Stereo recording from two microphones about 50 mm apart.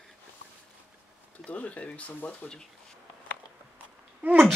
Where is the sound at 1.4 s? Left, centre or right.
Left.